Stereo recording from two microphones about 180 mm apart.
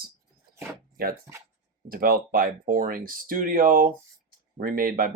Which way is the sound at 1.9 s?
55° right (ahead or behind).